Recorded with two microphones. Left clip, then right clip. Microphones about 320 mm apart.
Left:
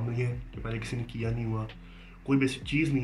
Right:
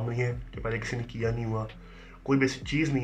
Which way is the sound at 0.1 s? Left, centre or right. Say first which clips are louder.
Right 4 dB; centre.